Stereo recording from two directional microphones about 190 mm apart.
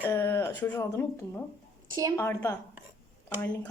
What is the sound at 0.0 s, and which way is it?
Speech, 15° left (ahead or behind).